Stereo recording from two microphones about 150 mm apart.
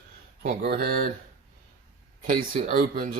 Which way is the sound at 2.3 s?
70° right (ahead or behind).